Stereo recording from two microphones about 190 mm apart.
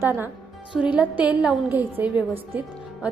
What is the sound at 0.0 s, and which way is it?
Speech, 10° right (ahead or behind).